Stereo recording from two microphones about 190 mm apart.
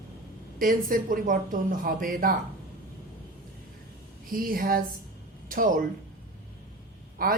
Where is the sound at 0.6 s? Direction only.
45° right (ahead or behind).